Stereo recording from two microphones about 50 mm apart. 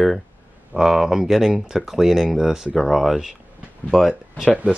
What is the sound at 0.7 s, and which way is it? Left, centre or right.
Speech, centre.